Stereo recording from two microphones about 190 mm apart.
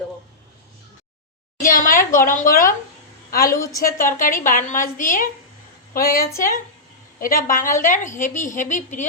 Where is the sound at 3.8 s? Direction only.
50° left (ahead or behind).